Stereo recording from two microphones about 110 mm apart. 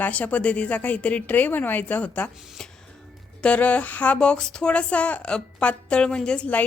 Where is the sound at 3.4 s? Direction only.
10° left (ahead or behind).